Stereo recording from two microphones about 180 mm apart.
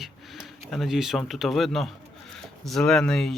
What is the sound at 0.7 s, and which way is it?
Speech, centre (ahead or behind).